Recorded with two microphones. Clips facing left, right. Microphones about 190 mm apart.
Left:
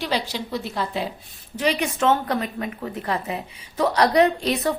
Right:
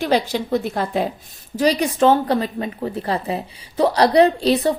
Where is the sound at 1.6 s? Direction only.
35° right (ahead or behind).